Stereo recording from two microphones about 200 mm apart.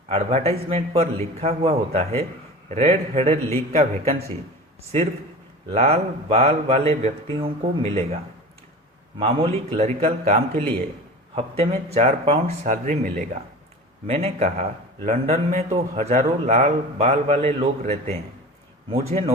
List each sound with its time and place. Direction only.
0.1 s a man's voice: 30° right (ahead or behind)
5.6 s a man's voice: 30° right (ahead or behind)